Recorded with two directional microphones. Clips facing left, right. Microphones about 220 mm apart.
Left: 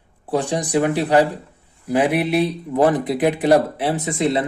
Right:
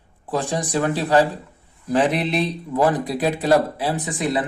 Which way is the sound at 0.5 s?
15° left (ahead or behind).